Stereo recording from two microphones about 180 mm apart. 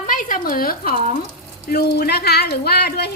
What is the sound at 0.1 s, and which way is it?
Speech, 50° left (ahead or behind).